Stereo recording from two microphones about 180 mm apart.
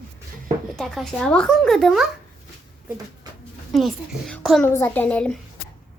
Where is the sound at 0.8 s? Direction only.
5° left (ahead or behind).